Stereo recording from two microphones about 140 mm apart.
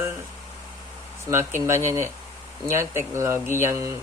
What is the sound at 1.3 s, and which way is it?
Speech, 20° right (ahead or behind).